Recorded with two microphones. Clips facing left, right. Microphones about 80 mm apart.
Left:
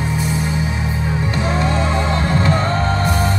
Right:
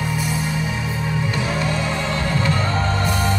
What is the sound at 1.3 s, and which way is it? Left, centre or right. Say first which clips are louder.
Music: left 6 dB; left.